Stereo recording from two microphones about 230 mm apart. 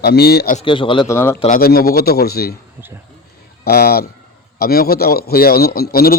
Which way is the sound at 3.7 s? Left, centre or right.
Left.